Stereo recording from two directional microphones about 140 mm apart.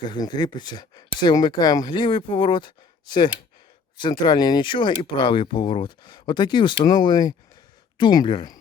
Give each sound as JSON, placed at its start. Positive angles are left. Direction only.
{"t": 0.0, "sound": "speech", "side_deg": 30}